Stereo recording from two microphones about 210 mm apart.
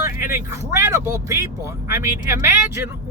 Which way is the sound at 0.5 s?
15° right (ahead or behind).